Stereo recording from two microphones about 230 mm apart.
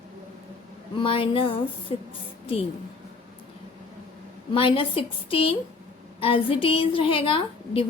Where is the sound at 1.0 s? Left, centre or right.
Left.